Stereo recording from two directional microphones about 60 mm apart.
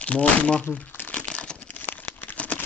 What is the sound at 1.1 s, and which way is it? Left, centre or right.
Crumpling, centre.